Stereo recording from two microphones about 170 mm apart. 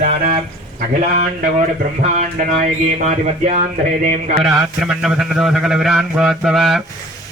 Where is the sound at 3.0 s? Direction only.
45° right (ahead or behind).